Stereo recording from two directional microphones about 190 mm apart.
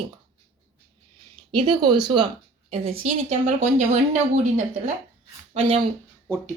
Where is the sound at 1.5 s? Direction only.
25° right (ahead or behind).